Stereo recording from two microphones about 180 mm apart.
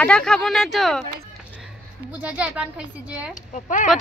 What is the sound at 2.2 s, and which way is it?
A woman's voice, 10° right (ahead or behind).